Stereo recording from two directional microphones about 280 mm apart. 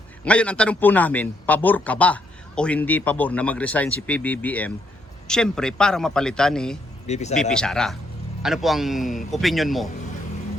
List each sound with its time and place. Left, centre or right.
0.3 s a man's voice: centre
7.1 s speech: left
7.5 s a man's voice: centre